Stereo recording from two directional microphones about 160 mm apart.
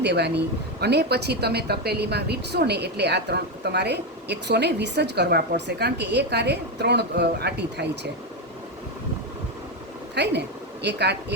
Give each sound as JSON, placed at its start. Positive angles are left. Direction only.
{"t": 0.0, "sound": "a woman's voice", "side_deg": -90}
{"t": 10.2, "sound": "a woman's voice", "side_deg": -90}